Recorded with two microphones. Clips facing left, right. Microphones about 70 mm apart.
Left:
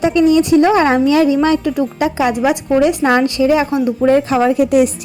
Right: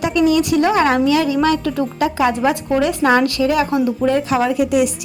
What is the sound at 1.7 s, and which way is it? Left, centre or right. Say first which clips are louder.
A woman's voice: left 2 dB; centre.